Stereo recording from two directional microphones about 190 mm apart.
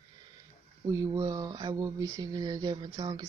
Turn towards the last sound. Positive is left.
turn(degrees=-20)  # may be behind; listen again after turning